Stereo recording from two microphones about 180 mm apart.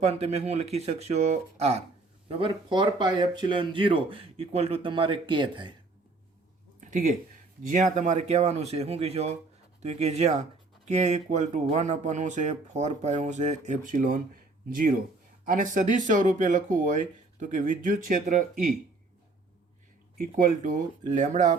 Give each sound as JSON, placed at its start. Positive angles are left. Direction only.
{"t": 0.0, "sound": "speech", "side_deg": -35}
{"t": 6.7, "sound": "a sound", "side_deg": -45}
{"t": 7.9, "sound": "speech", "side_deg": -40}
{"t": 20.1, "sound": "speech", "side_deg": -50}